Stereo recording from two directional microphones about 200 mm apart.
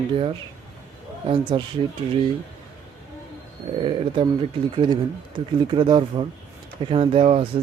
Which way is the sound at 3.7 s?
25° right (ahead or behind).